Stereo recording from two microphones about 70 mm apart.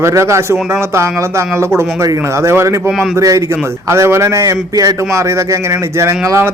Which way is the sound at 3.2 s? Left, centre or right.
Right.